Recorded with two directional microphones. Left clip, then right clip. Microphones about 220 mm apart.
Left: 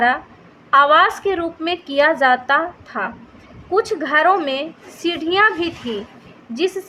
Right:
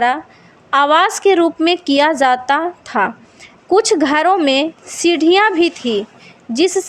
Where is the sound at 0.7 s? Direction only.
40° right (ahead or behind).